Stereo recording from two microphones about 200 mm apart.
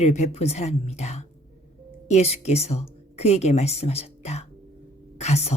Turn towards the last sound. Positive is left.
turn(degrees=35)  # may be behind; listen again after turning